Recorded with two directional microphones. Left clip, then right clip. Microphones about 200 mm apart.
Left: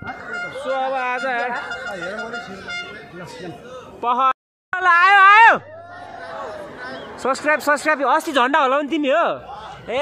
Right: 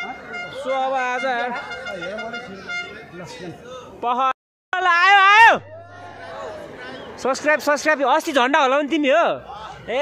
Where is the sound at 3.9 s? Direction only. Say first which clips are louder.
Left 2 dB; 5° left (ahead or behind).